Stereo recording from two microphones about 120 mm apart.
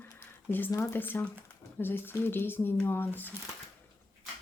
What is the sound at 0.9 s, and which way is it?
Speech, 15° left (ahead or behind).